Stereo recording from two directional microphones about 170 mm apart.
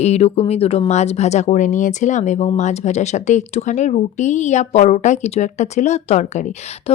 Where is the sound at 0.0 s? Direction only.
40° left (ahead or behind).